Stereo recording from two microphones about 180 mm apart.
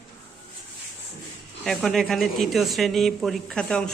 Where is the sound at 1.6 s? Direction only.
Centre (ahead or behind).